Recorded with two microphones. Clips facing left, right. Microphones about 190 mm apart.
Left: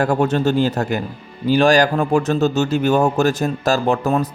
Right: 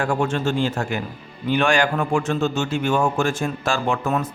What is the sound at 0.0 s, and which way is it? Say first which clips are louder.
A man's voice: left 5 dB; 40° left (ahead or behind).